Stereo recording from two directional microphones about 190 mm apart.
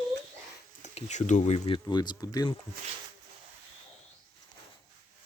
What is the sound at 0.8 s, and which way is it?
Speech, 35° left (ahead or behind).